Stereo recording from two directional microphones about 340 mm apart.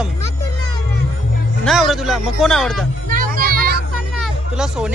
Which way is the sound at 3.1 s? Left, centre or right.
Right.